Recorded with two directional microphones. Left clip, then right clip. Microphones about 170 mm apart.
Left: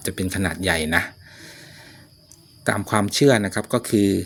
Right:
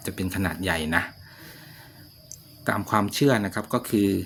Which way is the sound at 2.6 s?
30° left (ahead or behind).